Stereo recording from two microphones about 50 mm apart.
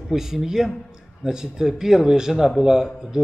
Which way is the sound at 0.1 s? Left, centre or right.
Centre.